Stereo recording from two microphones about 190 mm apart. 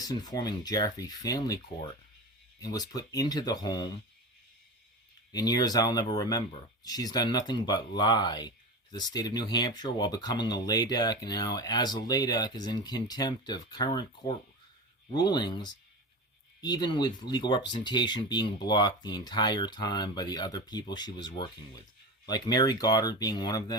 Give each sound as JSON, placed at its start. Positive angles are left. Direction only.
{"t": 0.0, "sound": "speech", "side_deg": 20}
{"t": 5.3, "sound": "speech", "side_deg": 20}